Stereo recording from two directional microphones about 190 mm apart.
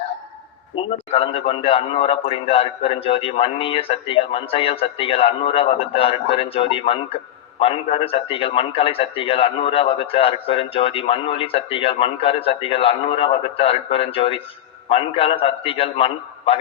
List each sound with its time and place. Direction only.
0.8 s a man's voice: 30° left (ahead or behind)